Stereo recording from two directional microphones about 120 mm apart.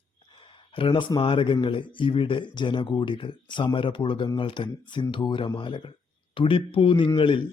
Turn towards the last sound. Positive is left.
turn(degrees=45)  # may be behind; listen again after turning